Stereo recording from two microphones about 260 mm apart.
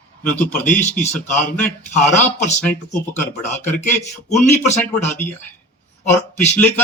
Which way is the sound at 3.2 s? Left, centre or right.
Left.